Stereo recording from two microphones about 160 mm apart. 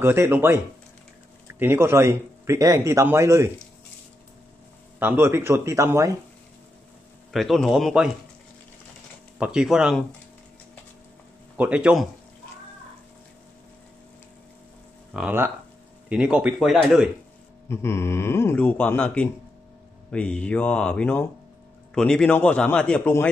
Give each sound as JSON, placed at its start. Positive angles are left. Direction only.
{"t": 0.0, "sound": "a man's voice", "side_deg": -15}
{"t": 1.6, "sound": "a man's voice", "side_deg": -15}
{"t": 4.9, "sound": "a man's voice", "side_deg": -15}
{"t": 7.3, "sound": "speech", "side_deg": 0}
{"t": 9.4, "sound": "speech", "side_deg": -5}
{"t": 11.5, "sound": "a man's voice", "side_deg": -10}
{"t": 15.1, "sound": "a man's voice", "side_deg": -10}
{"t": 17.6, "sound": "speech", "side_deg": 15}